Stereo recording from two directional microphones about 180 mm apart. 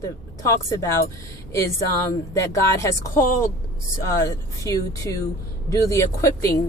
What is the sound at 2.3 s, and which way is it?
Speech, 15° left (ahead or behind).